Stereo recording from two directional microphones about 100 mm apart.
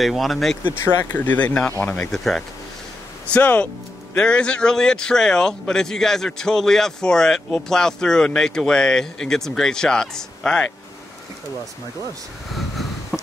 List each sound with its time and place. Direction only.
0.0 s speech: centre (ahead or behind)
0.8 s speech: 20° left (ahead or behind)
2.1 s speech: 5° left (ahead or behind)
3.3 s speech: 15° left (ahead or behind)
13.1 s a sound: centre (ahead or behind)